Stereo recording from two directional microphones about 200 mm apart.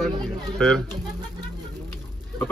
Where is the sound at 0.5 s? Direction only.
5° left (ahead or behind).